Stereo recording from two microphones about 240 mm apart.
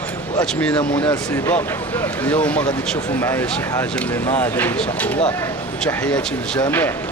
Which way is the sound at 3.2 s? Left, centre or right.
Centre.